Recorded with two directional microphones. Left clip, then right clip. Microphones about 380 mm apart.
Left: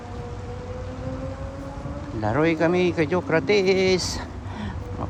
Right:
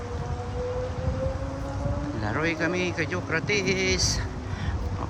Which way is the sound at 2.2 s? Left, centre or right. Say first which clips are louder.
Left 6 dB; centre.